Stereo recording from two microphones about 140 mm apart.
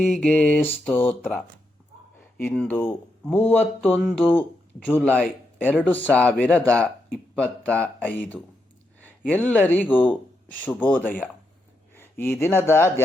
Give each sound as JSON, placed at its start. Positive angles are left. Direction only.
{"t": 0.0, "sound": "speech", "side_deg": 10}
{"t": 2.4, "sound": "speech", "side_deg": 10}